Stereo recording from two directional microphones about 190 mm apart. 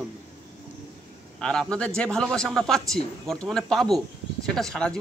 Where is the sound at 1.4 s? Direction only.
5° left (ahead or behind).